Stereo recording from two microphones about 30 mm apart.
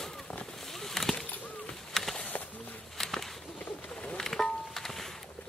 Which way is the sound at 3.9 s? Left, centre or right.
Left.